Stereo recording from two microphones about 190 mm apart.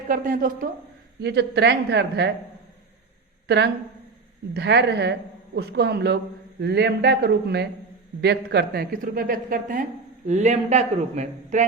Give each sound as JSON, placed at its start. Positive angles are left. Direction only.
{"t": 0.1, "sound": "a woman's voice", "side_deg": -45}
{"t": 1.2, "sound": "a woman's voice", "side_deg": -60}
{"t": 3.4, "sound": "a woman's voice", "side_deg": -65}